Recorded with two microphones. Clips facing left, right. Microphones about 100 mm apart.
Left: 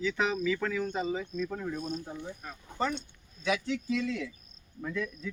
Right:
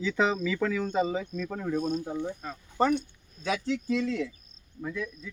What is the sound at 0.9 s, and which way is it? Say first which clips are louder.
Speech: right 4 dB; 90° right.